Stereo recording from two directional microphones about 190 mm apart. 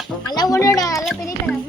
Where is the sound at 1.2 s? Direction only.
10° left (ahead or behind).